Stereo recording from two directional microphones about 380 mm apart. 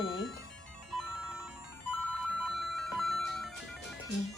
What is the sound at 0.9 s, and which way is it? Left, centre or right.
Music, centre.